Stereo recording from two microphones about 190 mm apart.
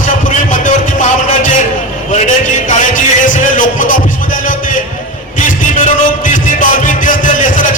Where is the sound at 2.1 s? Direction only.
40° left (ahead or behind).